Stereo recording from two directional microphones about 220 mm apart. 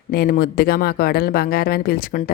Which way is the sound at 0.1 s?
45° left (ahead or behind).